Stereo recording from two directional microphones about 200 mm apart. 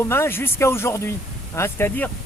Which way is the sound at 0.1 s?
10° left (ahead or behind).